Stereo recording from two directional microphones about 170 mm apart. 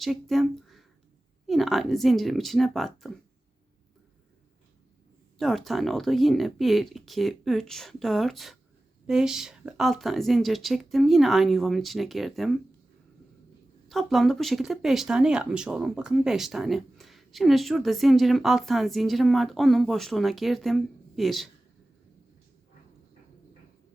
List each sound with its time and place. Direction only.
0.0 s speech: centre (ahead or behind)
5.4 s speech: centre (ahead or behind)
13.8 s speech: centre (ahead or behind)